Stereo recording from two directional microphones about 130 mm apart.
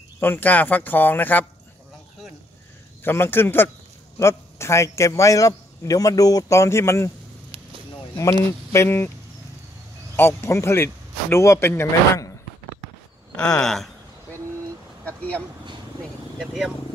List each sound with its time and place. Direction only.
0.2 s speech: 15° left (ahead or behind)
3.0 s a man's voice: 15° left (ahead or behind)
8.7 s a man's voice: 20° left (ahead or behind)
10.1 s a man's voice: 20° left (ahead or behind)
13.4 s a sound: 5° left (ahead or behind)
15.0 s speech: 10° left (ahead or behind)
16.3 s a sound: centre (ahead or behind)